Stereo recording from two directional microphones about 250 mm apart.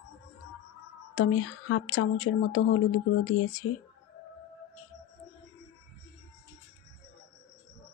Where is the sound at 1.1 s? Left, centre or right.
Left.